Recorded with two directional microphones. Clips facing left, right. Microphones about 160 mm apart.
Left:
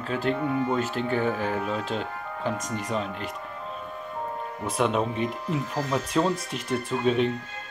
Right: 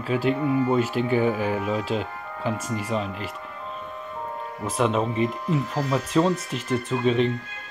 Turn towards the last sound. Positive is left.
turn(degrees=0)  # may be behind; listen again after turning